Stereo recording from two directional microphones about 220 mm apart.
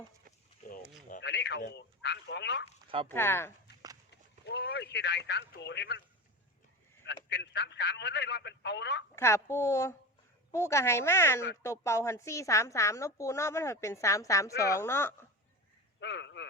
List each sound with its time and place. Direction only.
1.2 s speech: 50° left (ahead or behind)
3.1 s a woman's voice: 10° left (ahead or behind)
4.1 s speech: 50° left (ahead or behind)
7.0 s a man's voice: 50° left (ahead or behind)
9.1 s a woman's voice: 10° left (ahead or behind)
16.0 s a sound: 50° left (ahead or behind)